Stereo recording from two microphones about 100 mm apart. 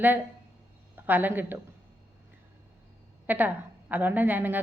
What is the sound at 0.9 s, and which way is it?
Speech, 20° right (ahead or behind).